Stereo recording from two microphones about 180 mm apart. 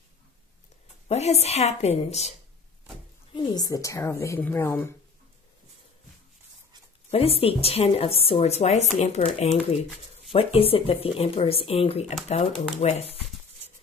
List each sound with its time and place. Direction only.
1.0 s speech: 35° left (ahead or behind)
3.5 s a woman's voice: 20° left (ahead or behind)
7.1 s speech: 35° left (ahead or behind)